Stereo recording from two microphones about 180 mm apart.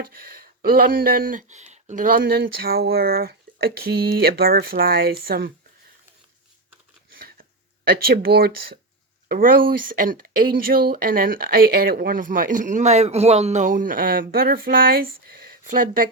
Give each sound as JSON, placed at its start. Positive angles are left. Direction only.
{"t": 0.0, "sound": "speech", "side_deg": -55}
{"t": 7.1, "sound": "a sound", "side_deg": -55}
{"t": 7.9, "sound": "speech", "side_deg": -55}